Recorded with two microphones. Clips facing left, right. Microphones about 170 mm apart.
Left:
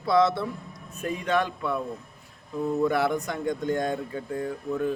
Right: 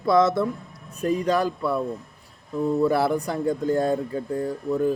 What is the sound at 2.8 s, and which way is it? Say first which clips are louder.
Speech: right 2 dB; 35° right (ahead or behind).